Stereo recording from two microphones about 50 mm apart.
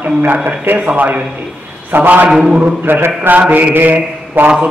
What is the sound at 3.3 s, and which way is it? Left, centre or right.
A man's voice, right.